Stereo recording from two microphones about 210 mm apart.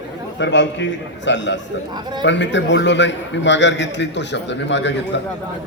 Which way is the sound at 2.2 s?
60° left (ahead or behind).